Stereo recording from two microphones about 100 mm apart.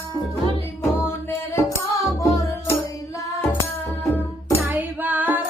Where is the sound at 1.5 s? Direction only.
30° left (ahead or behind).